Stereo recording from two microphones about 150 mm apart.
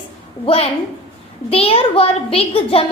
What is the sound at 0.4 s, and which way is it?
A child's voice, 40° left (ahead or behind).